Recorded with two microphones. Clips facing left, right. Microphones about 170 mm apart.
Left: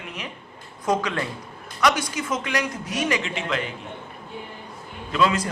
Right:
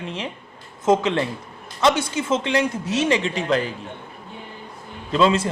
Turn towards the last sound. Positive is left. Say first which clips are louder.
# right 4 dB
turn(degrees=-25)  # may be behind; listen again after turning